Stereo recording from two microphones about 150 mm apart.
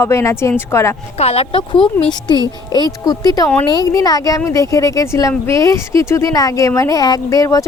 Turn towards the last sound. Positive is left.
turn(degrees=20)  # may be behind; listen again after turning